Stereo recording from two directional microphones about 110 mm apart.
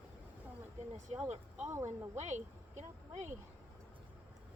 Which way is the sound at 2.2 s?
90° right.